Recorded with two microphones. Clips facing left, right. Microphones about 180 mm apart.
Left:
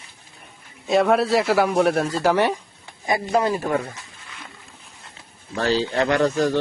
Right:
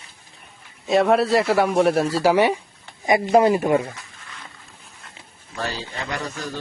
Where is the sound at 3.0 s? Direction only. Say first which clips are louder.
Right 5 dB; 20° right (ahead or behind).